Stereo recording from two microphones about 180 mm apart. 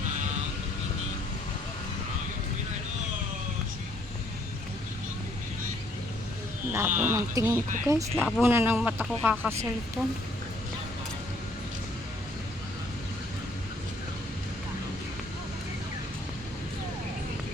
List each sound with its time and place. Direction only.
6.7 s speech: 10° right (ahead or behind)
9.2 s speech: 5° left (ahead or behind)